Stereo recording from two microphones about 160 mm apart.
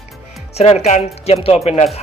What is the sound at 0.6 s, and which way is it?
Speech, 40° left (ahead or behind).